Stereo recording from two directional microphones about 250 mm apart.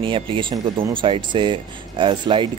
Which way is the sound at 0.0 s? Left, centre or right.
Right.